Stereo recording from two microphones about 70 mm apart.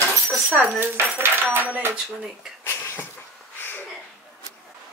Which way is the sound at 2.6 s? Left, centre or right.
Left.